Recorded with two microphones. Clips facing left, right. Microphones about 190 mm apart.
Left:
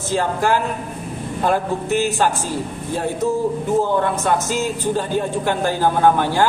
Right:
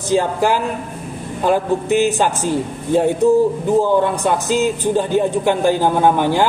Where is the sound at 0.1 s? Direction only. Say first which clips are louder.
Right 3 dB; 15° right (ahead or behind).